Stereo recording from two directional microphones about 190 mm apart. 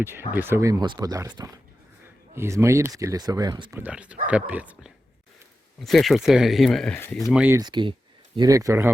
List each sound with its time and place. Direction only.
0.0 s speech: 10° right (ahead or behind)
3.8 s speech: 5° right (ahead or behind); by 7.3 s 10° left (ahead or behind)
7.3 s speech: 5° right (ahead or behind)
7.6 s speech: 25° right (ahead or behind)